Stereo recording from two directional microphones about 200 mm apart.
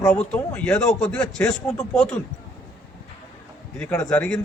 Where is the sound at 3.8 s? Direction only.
10° left (ahead or behind).